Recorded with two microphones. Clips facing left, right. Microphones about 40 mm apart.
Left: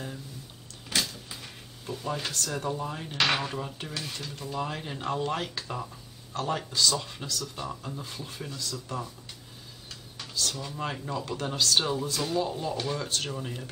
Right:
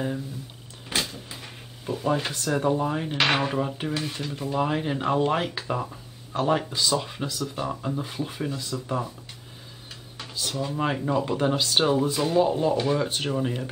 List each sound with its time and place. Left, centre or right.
0.8 s speech: right
10.1 s a sound: centre
10.7 s speech: right